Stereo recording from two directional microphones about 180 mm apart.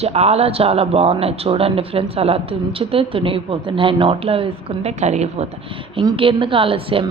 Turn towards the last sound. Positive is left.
turn(degrees=-30)  # may be behind; listen again after turning